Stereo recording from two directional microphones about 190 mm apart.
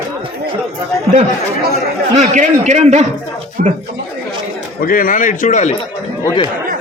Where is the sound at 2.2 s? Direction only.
40° right (ahead or behind).